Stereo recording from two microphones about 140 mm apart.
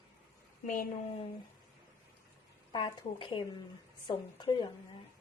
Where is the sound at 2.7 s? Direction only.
35° left (ahead or behind).